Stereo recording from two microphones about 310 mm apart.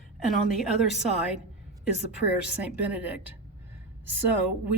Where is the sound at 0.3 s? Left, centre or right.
Centre.